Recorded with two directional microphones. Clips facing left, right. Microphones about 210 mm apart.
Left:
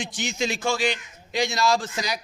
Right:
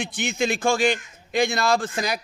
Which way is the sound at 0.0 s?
60° right (ahead or behind).